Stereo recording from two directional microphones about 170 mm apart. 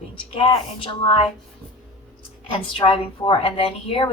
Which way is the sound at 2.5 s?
30° left (ahead or behind).